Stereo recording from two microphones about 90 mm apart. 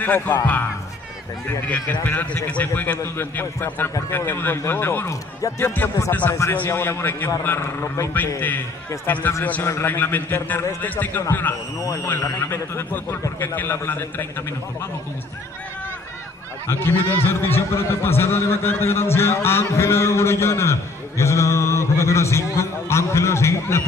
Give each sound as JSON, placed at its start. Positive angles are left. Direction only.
{"t": 0.0, "sound": "speech", "side_deg": 20}
{"t": 1.7, "sound": "speech", "side_deg": 20}
{"t": 11.8, "sound": "a man's voice", "side_deg": 40}
{"t": 16.6, "sound": "a man's voice", "side_deg": 25}